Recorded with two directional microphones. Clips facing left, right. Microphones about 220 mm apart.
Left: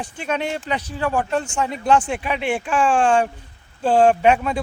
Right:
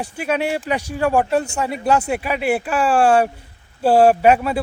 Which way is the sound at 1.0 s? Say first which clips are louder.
Right 5 dB; 45° right (ahead or behind).